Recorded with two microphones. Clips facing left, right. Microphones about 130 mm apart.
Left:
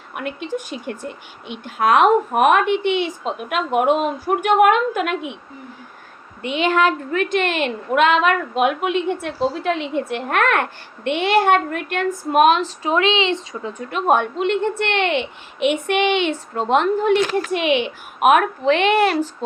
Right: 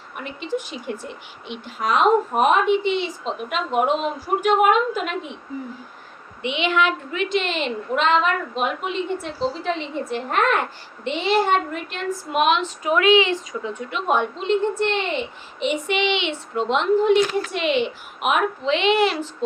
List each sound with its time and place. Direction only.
0.1 s a woman's voice: 65° left (ahead or behind)
6.4 s a woman's voice: 45° left (ahead or behind); by 13.6 s 25° left (ahead or behind)
13.9 s a woman's voice: 50° left (ahead or behind)